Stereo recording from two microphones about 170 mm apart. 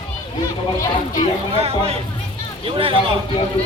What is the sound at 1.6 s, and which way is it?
Speech, 35° right (ahead or behind).